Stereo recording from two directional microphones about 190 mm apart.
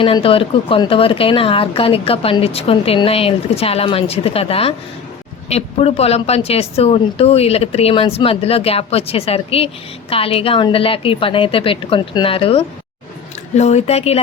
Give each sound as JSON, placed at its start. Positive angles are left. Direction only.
{"t": 0.0, "sound": "a woman's voice", "side_deg": 30}